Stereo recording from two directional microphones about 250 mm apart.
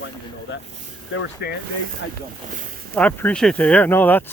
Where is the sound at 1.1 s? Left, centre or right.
Left.